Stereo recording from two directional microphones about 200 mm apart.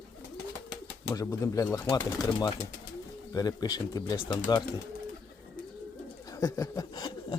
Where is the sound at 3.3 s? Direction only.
20° left (ahead or behind).